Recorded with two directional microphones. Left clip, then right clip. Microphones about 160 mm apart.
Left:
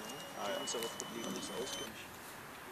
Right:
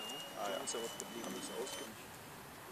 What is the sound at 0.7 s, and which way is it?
Speech, 40° right (ahead or behind).